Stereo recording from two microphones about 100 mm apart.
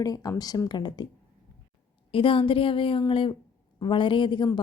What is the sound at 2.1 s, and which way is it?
A woman's voice, 65° left (ahead or behind).